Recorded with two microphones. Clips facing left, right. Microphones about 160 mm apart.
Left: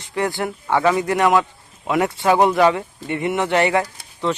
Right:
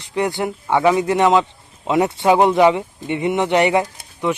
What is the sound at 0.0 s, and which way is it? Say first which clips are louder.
Speech: right 2 dB; 20° right (ahead or behind).